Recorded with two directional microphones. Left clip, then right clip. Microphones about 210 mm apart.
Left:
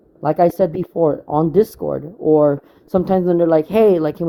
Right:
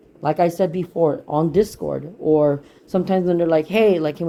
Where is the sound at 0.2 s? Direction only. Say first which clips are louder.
Left 4 dB; 50° left (ahead or behind).